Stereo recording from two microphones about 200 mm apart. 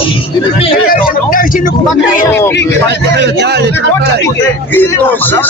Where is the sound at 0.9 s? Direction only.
45° left (ahead or behind).